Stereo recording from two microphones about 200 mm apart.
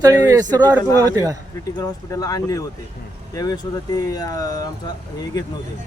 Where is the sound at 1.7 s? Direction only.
15° left (ahead or behind).